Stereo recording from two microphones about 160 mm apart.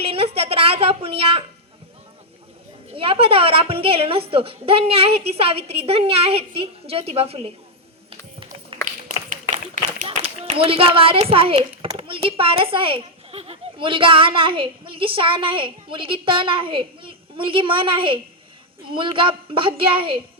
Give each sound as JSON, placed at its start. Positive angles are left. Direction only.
{"t": 0.0, "sound": "a child's voice", "side_deg": -35}
{"t": 2.9, "sound": "a child's voice", "side_deg": -35}
{"t": 8.7, "sound": "a sound", "side_deg": -35}
{"t": 9.3, "sound": "clapping", "side_deg": -55}
{"t": 10.1, "sound": "a child's voice", "side_deg": -35}